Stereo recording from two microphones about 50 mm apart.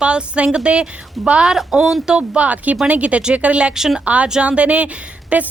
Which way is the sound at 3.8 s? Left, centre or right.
Centre.